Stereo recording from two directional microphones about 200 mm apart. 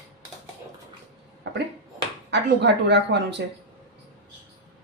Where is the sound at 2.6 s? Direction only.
60° right (ahead or behind).